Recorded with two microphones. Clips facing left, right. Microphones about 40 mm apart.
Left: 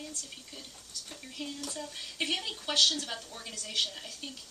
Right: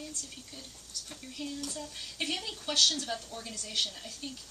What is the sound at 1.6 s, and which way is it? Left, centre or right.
A woman's voice, centre.